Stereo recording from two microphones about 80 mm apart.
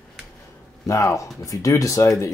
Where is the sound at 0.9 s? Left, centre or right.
Left.